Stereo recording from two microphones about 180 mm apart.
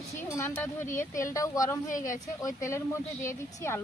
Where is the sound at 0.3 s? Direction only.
15° left (ahead or behind).